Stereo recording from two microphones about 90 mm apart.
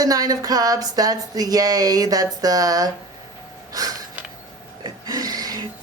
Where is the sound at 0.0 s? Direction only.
45° right (ahead or behind).